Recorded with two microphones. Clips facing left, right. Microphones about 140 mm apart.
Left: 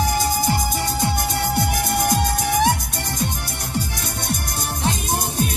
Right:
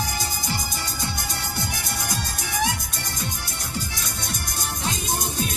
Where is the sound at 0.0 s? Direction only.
55° left (ahead or behind).